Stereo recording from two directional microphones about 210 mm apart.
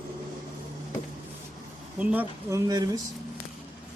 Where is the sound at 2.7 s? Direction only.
20° right (ahead or behind).